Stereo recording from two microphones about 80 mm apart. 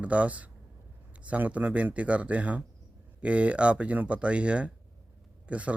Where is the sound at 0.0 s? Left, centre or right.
Centre.